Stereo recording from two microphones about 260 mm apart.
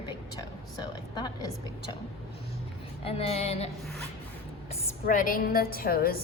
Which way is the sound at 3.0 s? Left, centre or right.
Left.